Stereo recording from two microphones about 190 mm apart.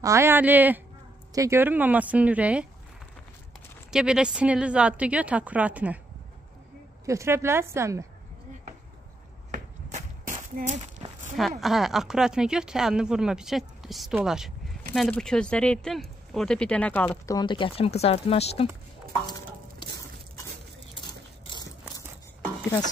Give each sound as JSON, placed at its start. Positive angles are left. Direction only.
{"t": 0.0, "sound": "a woman's voice", "side_deg": -15}
{"t": 3.9, "sound": "a woman's voice", "side_deg": -5}
{"t": 7.1, "sound": "a woman's voice", "side_deg": -15}
{"t": 9.5, "sound": "a sound", "side_deg": -40}
{"t": 11.6, "sound": "speech", "side_deg": 0}
{"t": 17.4, "sound": "speech", "side_deg": 25}
{"t": 21.1, "sound": "a sound", "side_deg": 20}